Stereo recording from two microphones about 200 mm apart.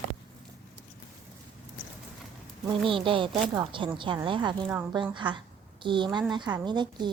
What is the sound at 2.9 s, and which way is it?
Speech, 25° right (ahead or behind).